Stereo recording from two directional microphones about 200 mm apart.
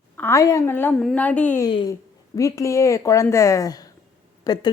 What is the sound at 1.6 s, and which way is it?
A woman's voice, 20° left (ahead or behind).